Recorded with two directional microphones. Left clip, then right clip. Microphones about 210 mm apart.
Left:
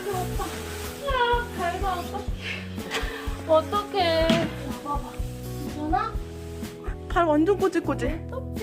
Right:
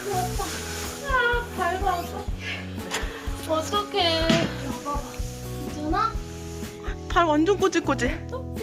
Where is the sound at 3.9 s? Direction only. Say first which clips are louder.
Even; 35° left (ahead or behind).